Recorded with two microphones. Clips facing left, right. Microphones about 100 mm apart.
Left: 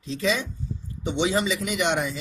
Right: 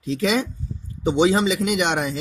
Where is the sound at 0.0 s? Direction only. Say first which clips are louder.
Right 4 dB; 80° right.